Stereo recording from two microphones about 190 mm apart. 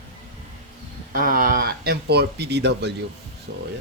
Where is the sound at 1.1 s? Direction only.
50° right (ahead or behind).